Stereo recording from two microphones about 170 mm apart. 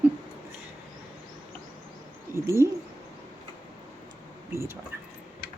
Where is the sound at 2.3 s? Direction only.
15° right (ahead or behind).